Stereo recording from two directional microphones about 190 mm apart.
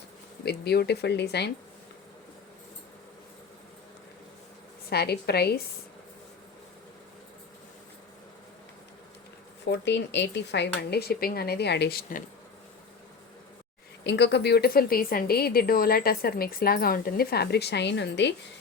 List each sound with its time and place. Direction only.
0.4 s speech: 60° left (ahead or behind)
4.9 s speech: 55° left (ahead or behind)
9.6 s speech: 70° left (ahead or behind)
14.0 s a woman's voice: 65° left (ahead or behind)